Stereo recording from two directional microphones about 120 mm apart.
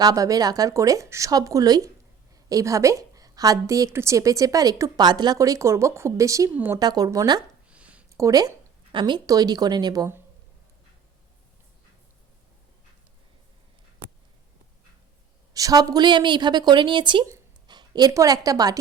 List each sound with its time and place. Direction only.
0.0 s a woman's voice: 30° right (ahead or behind)
6.7 s speech: 35° right (ahead or behind)
7.7 s a sound: 10° right (ahead or behind)
8.1 s speech: 30° right (ahead or behind)
8.9 s speech: 40° right (ahead or behind)
15.5 s a woman's voice: 30° right (ahead or behind)